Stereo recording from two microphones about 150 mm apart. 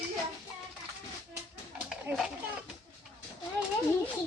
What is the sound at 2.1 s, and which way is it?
Speech, 15° right (ahead or behind).